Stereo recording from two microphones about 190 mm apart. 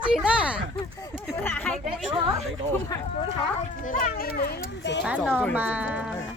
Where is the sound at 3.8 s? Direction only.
45° left (ahead or behind).